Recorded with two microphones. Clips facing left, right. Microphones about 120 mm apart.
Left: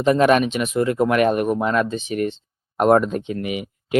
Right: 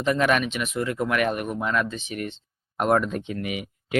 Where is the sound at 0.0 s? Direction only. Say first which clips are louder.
Left 6 dB; 35° left (ahead or behind).